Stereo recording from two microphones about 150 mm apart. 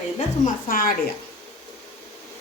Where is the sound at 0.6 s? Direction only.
70° left (ahead or behind).